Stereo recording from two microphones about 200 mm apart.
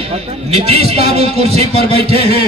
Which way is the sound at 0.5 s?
30° right (ahead or behind).